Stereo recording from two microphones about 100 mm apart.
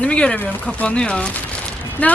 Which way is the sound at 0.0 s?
10° left (ahead or behind).